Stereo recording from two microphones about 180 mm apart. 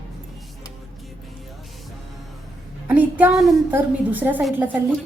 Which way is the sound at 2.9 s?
10° right (ahead or behind).